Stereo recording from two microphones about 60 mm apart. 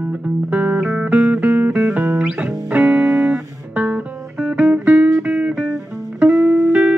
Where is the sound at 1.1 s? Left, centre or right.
Right.